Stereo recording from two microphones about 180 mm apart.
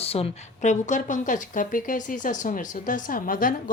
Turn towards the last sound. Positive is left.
turn(degrees=50)  # may be behind; listen again after turning